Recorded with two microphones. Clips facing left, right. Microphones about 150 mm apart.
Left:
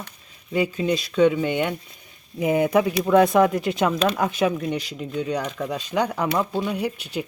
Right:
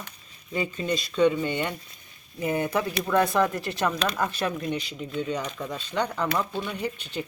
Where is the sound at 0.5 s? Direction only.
5° left (ahead or behind).